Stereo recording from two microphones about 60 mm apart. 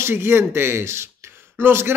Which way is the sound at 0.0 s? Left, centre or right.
Right.